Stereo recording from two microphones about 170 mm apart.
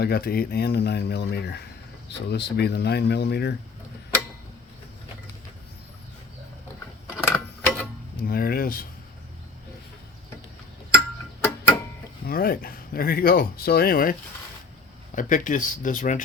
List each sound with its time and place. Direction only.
0.0 s speech: 65° left (ahead or behind)
7.1 s a sound: 15° left (ahead or behind)
8.2 s speech: 60° left (ahead or behind)
10.9 s clock: 15° left (ahead or behind)
12.2 s speech: 60° left (ahead or behind)